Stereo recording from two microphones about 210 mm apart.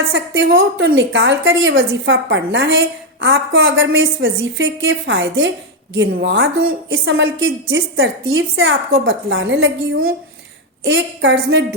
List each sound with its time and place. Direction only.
0.1 s a woman's voice: 60° right (ahead or behind)